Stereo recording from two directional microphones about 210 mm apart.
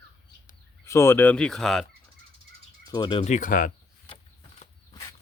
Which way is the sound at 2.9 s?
20° left (ahead or behind).